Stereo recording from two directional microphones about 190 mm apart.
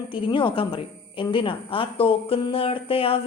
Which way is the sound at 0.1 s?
25° left (ahead or behind).